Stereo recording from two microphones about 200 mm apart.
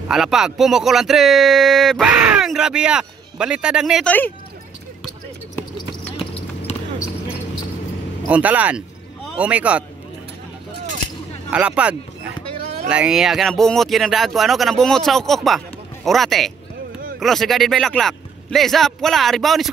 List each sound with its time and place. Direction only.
0.1 s speech: centre (ahead or behind)
6.1 s a sound: 30° left (ahead or behind)
8.3 s speech: 5° right (ahead or behind)
11.5 s speech: 5° right (ahead or behind)